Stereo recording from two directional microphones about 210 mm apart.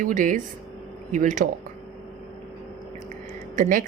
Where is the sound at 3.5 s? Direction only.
40° right (ahead or behind).